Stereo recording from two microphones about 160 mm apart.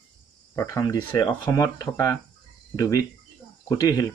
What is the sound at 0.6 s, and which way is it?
Speech, 20° left (ahead or behind).